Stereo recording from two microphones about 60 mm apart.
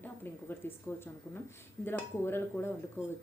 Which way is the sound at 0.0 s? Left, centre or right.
Left.